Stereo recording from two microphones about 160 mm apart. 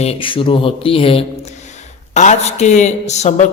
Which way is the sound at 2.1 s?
45° left (ahead or behind).